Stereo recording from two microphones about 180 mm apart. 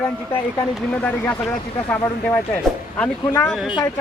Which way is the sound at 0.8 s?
5° left (ahead or behind).